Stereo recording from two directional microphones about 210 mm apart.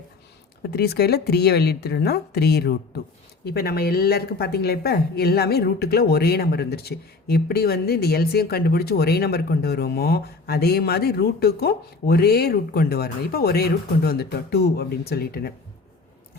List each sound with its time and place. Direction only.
0.7 s speech: 50° left (ahead or behind)